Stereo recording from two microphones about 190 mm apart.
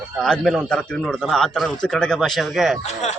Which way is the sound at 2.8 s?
35° left (ahead or behind).